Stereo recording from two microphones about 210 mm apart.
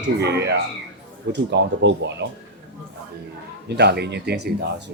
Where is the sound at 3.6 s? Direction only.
50° right (ahead or behind).